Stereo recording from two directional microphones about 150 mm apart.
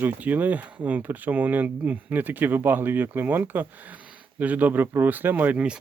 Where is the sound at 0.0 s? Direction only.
10° right (ahead or behind).